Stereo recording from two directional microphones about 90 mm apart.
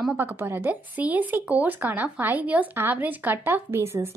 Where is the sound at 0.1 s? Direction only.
25° right (ahead or behind).